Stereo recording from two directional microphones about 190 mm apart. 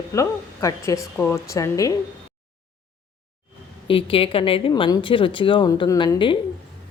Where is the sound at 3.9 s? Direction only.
30° left (ahead or behind).